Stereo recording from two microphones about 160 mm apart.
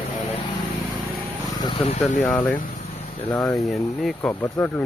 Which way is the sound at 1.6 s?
35° left (ahead or behind).